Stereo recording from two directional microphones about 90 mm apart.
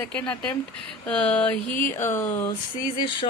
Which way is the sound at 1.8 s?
25° left (ahead or behind).